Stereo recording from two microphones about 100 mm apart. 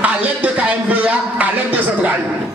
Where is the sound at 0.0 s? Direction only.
15° right (ahead or behind).